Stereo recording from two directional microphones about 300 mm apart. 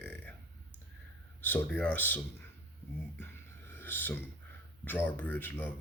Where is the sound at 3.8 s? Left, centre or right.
Centre.